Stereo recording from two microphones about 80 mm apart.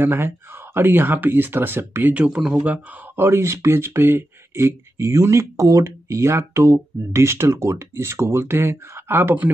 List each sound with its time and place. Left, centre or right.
0.0 s speech: right
2.1 s speech: centre
3.2 s speech: right